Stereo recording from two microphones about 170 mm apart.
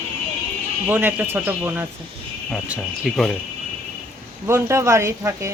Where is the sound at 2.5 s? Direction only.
Centre (ahead or behind).